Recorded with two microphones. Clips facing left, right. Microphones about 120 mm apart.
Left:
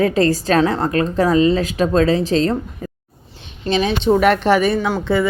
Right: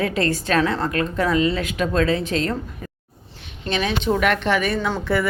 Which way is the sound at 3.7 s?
30° left (ahead or behind).